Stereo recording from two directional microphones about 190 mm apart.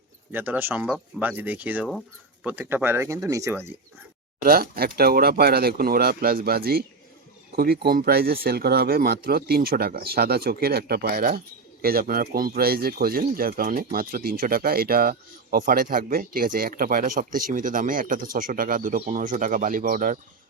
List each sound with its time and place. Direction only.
0.3 s speech: 10° right (ahead or behind)
4.4 s speech: 50° right (ahead or behind)